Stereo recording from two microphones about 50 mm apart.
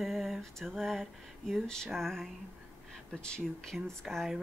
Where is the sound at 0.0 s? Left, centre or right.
Centre.